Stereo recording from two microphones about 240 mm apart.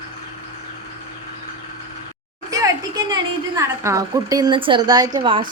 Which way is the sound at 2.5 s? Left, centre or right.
Centre.